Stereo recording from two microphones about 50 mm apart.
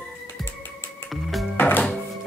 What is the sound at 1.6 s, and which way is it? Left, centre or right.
Music, left.